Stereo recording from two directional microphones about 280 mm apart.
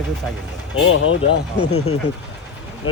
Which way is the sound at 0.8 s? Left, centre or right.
Left.